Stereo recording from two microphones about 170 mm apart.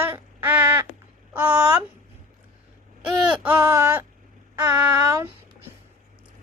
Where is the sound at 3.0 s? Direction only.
5° right (ahead or behind).